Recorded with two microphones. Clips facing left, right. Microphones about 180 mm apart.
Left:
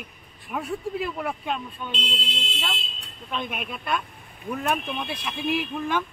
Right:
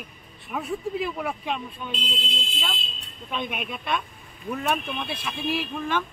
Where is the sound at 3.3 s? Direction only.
Centre (ahead or behind).